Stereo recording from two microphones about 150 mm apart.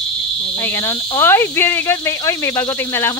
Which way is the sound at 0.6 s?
15° left (ahead or behind).